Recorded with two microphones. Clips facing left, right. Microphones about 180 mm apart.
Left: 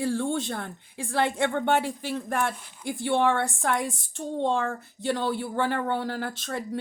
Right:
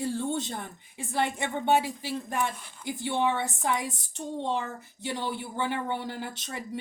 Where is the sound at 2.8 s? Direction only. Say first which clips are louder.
Left 4 dB; 70° left (ahead or behind).